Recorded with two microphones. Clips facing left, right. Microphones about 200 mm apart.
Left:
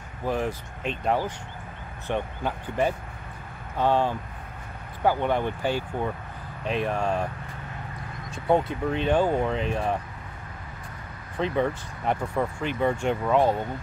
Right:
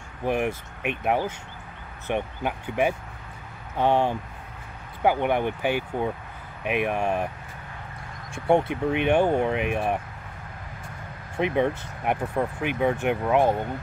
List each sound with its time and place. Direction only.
0.2 s speech: 20° right (ahead or behind)
8.5 s speech: 20° right (ahead or behind)
11.3 s speech: 15° right (ahead or behind)